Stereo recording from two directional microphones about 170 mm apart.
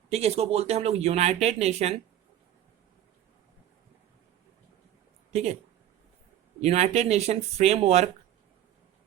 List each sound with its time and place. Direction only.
0.1 s speech: 40° right (ahead or behind)
6.6 s speech: 40° right (ahead or behind)